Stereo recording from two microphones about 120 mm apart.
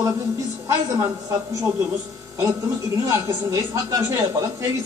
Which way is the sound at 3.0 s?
25° right (ahead or behind).